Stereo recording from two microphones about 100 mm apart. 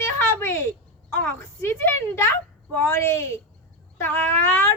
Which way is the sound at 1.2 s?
25° left (ahead or behind).